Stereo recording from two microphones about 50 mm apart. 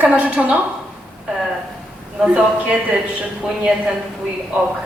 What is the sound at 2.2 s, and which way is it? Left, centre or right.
Speech, centre.